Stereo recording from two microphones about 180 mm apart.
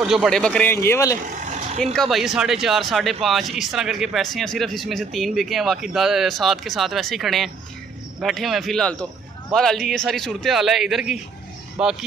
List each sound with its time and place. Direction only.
0.0 s a man's voice: 5° right (ahead or behind); by 1.2 s 15° left (ahead or behind)
1.4 s vehicle: 40° right (ahead or behind)
2.0 s speech: centre (ahead or behind)